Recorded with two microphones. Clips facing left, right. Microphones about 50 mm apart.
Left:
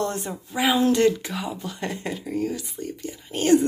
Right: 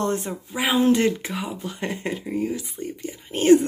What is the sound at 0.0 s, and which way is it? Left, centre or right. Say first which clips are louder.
Speech: right 2 dB; right.